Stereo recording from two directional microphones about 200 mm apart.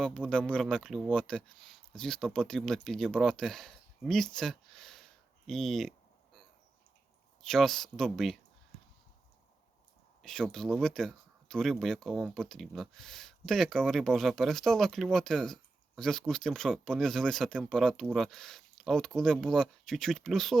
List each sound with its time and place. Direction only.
0.0 s speech: 5° left (ahead or behind)
7.4 s speech: centre (ahead or behind)
10.2 s speech: centre (ahead or behind)